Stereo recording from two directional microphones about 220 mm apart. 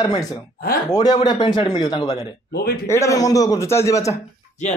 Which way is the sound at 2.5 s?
45° left (ahead or behind).